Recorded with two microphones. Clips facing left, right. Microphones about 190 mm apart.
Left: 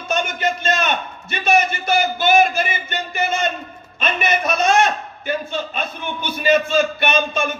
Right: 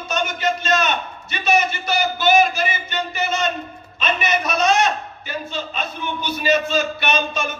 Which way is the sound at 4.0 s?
55° left (ahead or behind).